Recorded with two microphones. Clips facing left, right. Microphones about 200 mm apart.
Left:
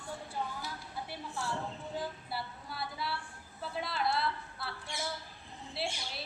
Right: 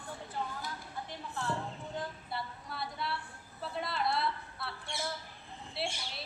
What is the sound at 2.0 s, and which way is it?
Female singing, 5° left (ahead or behind).